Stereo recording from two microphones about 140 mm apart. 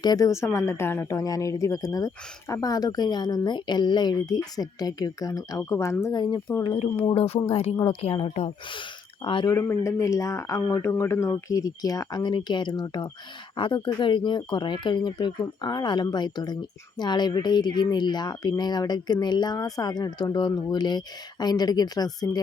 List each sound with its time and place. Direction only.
0.0 s a woman's voice: 25° left (ahead or behind)
7.0 s speech: 40° left (ahead or behind)
9.6 s a woman's voice: 20° left (ahead or behind)